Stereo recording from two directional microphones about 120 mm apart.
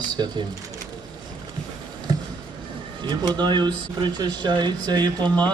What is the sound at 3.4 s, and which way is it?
Speech, 40° right (ahead or behind).